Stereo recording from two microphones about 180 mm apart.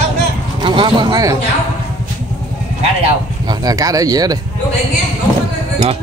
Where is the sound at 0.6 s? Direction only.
25° right (ahead or behind).